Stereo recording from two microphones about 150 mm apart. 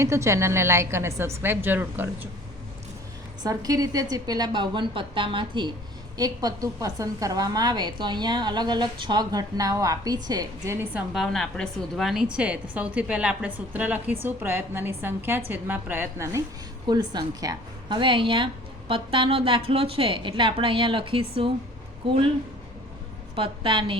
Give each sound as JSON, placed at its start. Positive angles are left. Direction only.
{"t": 0.0, "sound": "a woman's voice", "side_deg": -20}
{"t": 3.4, "sound": "a woman's voice", "side_deg": -25}
{"t": 11.1, "sound": "a woman's voice", "side_deg": 0}
{"t": 16.8, "sound": "a woman's voice", "side_deg": -30}
{"t": 23.3, "sound": "a woman's voice", "side_deg": -35}